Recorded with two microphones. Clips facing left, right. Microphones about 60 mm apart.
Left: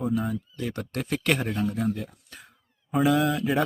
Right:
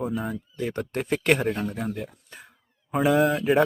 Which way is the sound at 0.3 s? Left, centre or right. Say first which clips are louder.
Right 1 dB; right.